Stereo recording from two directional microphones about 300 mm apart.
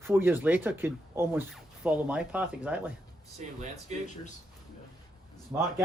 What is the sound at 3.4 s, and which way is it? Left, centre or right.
Speech, right.